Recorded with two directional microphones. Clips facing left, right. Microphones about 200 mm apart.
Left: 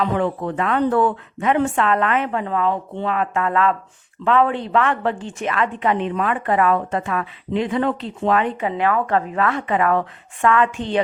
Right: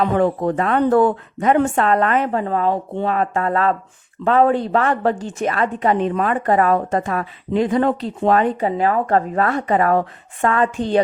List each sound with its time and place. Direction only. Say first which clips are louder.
0.0 s a woman's voice: right 4 dB; 40° right (ahead or behind)